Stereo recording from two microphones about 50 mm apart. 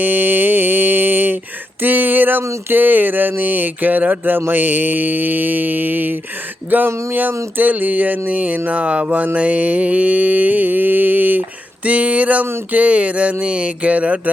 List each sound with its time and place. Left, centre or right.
0.0 s mantra: right
1.8 s speech: right